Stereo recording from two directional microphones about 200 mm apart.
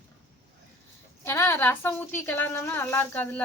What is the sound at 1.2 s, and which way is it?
A woman's voice, 10° left (ahead or behind).